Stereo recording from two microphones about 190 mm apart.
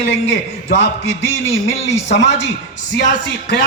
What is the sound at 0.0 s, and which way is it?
A man's voice, 75° left (ahead or behind).